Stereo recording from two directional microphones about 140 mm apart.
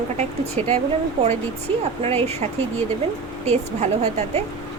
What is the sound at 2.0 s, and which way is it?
Speech, 50° right (ahead or behind).